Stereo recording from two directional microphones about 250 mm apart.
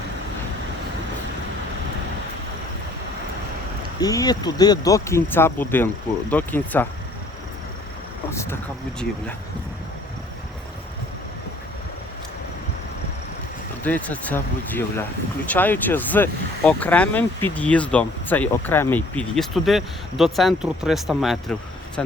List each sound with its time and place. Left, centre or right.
4.0 s speech: centre
8.3 s a sound: centre
13.8 s speech: centre